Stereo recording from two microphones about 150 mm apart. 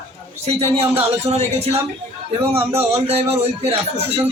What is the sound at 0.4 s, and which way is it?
Speech, 45° right (ahead or behind).